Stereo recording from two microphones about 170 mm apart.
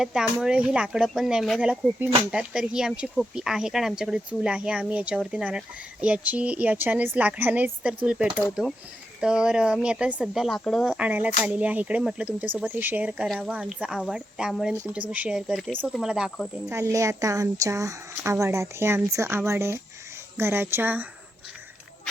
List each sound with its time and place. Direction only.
0.0 s speech: 5° right (ahead or behind)
10.9 s speech: 10° right (ahead or behind)
16.6 s speech: 15° right (ahead or behind)